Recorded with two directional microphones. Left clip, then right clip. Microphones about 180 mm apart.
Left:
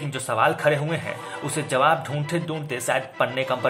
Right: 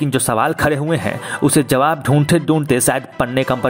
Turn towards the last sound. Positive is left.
turn(degrees=-45)  # may be behind; listen again after turning